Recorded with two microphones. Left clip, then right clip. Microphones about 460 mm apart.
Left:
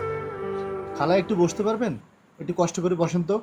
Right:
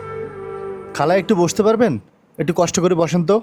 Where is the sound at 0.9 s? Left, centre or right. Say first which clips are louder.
Right 6 dB; right.